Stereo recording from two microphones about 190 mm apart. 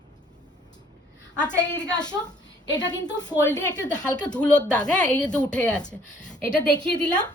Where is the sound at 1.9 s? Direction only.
20° left (ahead or behind).